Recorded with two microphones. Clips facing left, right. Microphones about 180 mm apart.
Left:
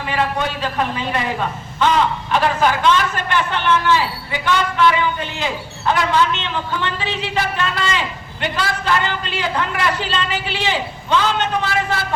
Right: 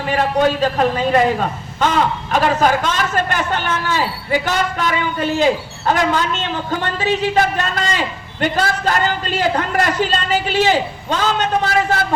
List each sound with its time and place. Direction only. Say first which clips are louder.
0.0 s a man's voice: right 5 dB; 45° right (ahead or behind)